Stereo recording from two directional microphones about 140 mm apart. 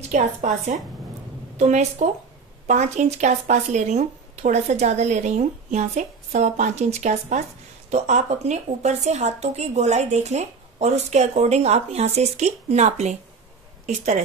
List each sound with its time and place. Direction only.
0.1 s a woman's voice: 55° right (ahead or behind)